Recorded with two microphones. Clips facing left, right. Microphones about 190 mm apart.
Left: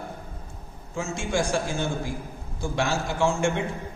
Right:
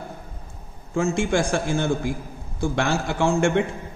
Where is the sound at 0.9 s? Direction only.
60° right (ahead or behind).